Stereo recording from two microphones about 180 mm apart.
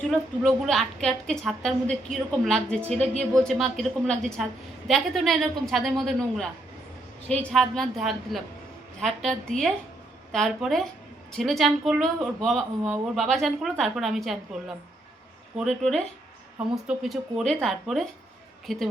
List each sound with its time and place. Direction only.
0.1 s a woman's voice: centre (ahead or behind)
15.5 s a woman's voice: centre (ahead or behind)